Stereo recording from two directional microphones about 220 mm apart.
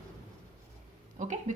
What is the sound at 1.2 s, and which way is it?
Speech, 35° right (ahead or behind).